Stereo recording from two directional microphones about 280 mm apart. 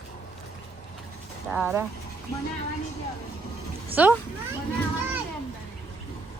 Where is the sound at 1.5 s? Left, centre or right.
Centre.